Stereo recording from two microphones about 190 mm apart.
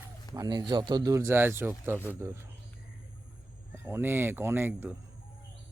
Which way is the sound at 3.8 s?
10° right (ahead or behind).